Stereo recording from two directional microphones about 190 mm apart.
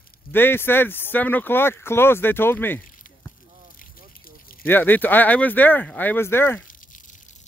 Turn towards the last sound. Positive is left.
turn(degrees=45)  # may be behind; listen again after turning